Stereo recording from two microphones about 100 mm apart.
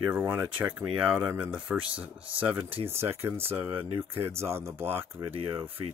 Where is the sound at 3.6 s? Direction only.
65° right (ahead or behind).